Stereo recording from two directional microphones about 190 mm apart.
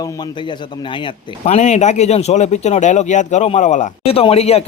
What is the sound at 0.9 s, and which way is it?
Speech, 30° left (ahead or behind).